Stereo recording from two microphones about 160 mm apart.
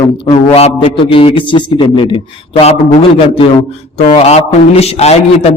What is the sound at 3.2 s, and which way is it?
A man's voice, 35° left (ahead or behind).